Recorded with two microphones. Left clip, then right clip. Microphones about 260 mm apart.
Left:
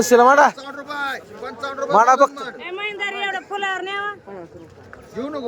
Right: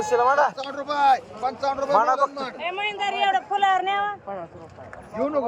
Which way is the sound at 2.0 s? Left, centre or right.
Left.